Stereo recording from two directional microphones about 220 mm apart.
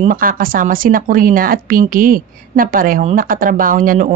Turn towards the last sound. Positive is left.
turn(degrees=-35)  # may be behind; listen again after turning